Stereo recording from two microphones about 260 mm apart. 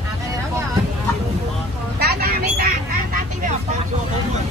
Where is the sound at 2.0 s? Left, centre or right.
Right.